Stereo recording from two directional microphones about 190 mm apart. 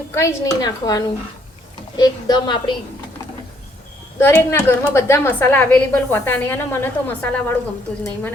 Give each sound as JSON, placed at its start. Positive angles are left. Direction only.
{"t": 0.1, "sound": "a woman's voice", "side_deg": 15}
{"t": 4.2, "sound": "a woman's voice", "side_deg": 10}